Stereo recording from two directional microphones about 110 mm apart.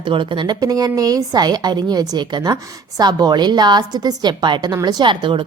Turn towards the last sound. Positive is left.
turn(degrees=-50)  # may be behind; listen again after turning